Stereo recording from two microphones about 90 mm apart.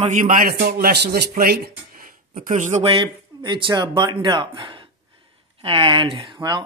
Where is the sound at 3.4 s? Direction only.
55° right (ahead or behind).